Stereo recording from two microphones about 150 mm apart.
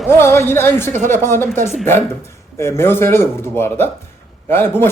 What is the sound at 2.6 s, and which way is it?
A woman's voice, 15° left (ahead or behind).